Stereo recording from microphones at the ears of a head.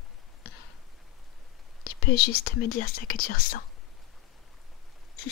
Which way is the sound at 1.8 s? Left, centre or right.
Left.